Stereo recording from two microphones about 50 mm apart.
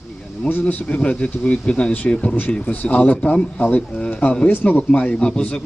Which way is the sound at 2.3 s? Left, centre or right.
Left.